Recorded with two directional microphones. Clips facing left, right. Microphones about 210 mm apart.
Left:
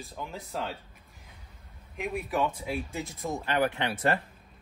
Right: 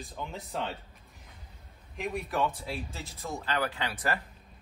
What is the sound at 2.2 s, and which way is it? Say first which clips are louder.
Speech: left 2 dB; 10° left (ahead or behind).